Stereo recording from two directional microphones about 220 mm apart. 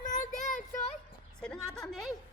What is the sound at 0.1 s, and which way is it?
Child singing, 35° left (ahead or behind).